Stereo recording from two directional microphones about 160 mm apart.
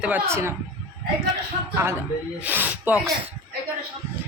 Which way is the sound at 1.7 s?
15° right (ahead or behind).